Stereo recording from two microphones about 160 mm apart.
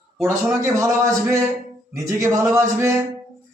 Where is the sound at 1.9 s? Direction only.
20° right (ahead or behind).